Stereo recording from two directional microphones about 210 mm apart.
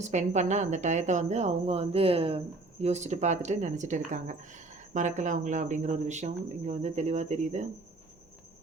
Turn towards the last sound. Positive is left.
turn(degrees=-35)  # may be behind; listen again after turning